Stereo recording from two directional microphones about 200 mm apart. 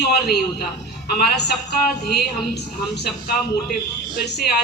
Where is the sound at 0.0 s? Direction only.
55° left (ahead or behind).